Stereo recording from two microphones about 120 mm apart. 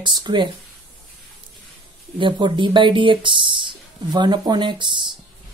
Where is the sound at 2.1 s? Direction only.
40° right (ahead or behind).